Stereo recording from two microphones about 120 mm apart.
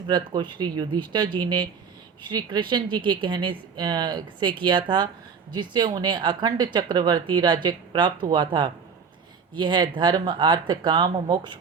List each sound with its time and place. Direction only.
0.1 s speech: 40° right (ahead or behind)